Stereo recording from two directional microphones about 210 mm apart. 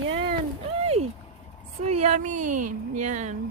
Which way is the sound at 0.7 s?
30° right (ahead or behind).